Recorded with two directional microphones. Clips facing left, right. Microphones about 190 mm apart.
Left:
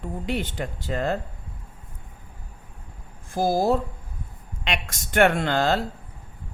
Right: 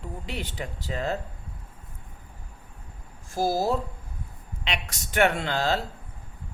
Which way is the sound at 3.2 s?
55° left (ahead or behind).